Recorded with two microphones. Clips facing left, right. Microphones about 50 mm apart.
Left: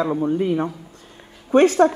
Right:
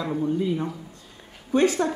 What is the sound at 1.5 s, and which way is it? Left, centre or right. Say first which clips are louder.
Speech: left 6 dB; left.